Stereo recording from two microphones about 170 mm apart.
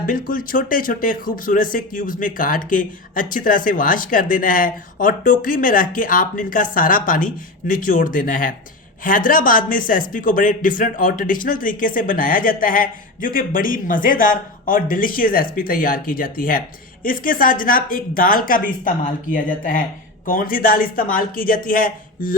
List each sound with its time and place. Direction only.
0.0 s speech: 55° left (ahead or behind)